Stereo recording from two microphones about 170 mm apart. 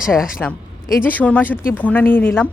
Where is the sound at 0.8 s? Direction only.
15° left (ahead or behind).